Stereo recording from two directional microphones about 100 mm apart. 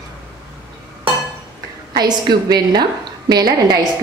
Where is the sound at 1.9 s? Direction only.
45° right (ahead or behind).